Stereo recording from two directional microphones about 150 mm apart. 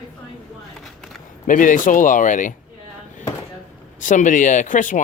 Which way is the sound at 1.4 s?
60° left (ahead or behind).